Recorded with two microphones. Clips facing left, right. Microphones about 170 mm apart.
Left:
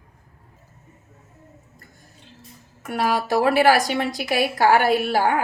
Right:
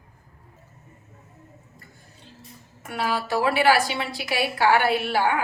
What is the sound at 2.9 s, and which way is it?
A woman's voice, 45° left (ahead or behind).